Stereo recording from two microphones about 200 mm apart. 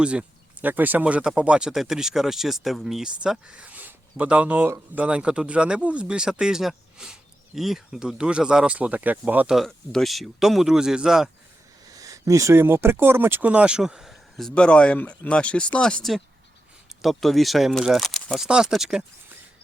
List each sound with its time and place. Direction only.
0.0 s speech: 5° right (ahead or behind)
11.9 s speech: 15° right (ahead or behind)